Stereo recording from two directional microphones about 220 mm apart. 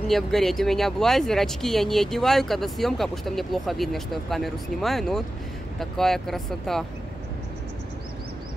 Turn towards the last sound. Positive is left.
turn(degrees=0)  # may be behind; listen again after turning